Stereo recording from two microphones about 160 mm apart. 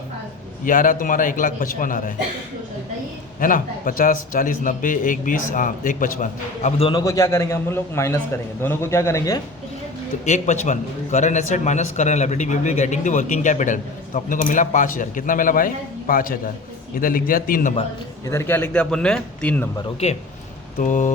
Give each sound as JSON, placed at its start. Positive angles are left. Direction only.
{"t": 0.6, "sound": "a man's voice", "side_deg": 55}
{"t": 3.4, "sound": "a man's voice", "side_deg": 60}
{"t": 7.0, "sound": "a man's voice", "side_deg": 20}
{"t": 10.2, "sound": "a man's voice", "side_deg": 50}
{"t": 18.3, "sound": "a man's voice", "side_deg": 15}
{"t": 20.7, "sound": "a man's voice", "side_deg": 50}